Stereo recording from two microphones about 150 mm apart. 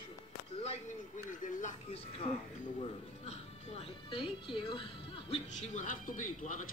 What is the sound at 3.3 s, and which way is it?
Music, 40° left (ahead or behind).